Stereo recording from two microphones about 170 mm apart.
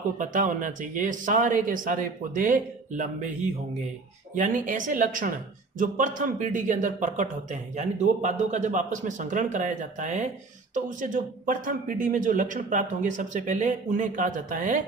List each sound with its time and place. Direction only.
0.2 s speech: 50° right (ahead or behind)